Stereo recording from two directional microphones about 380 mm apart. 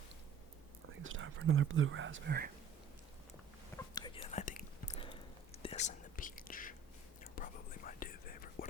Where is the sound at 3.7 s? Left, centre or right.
Centre.